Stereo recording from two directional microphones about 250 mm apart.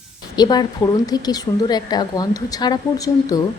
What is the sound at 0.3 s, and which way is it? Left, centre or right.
A woman's voice, centre.